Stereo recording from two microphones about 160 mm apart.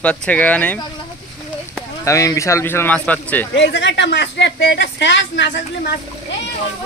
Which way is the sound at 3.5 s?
90° left.